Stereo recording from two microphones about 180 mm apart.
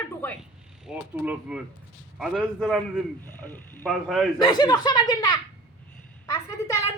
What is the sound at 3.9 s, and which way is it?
Mechanisms, centre (ahead or behind).